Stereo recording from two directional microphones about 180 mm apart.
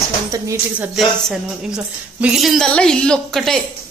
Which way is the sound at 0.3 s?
15° right (ahead or behind).